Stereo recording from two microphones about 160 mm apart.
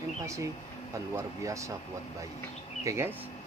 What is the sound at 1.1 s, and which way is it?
Speech, 20° right (ahead or behind).